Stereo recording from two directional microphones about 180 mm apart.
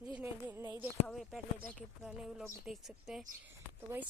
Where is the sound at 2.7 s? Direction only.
Centre (ahead or behind).